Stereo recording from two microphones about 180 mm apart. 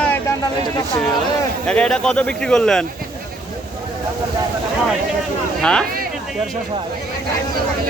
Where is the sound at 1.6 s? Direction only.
5° left (ahead or behind).